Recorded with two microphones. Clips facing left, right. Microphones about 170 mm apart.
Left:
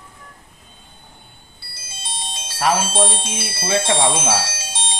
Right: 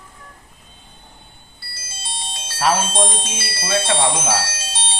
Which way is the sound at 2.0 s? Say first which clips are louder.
Left 1 dB; centre (ahead or behind).